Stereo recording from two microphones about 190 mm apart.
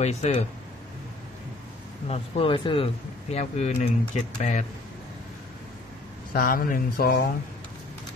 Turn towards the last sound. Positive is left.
turn(degrees=50)  # may be behind; listen again after turning